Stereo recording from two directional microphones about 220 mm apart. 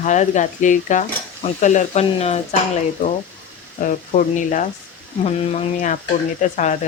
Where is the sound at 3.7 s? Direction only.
35° left (ahead or behind).